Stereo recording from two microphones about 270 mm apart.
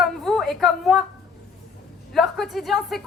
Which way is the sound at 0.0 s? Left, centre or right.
Centre.